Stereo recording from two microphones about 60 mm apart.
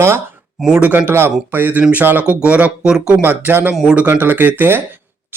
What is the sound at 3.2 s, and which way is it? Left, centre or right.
Speech, right.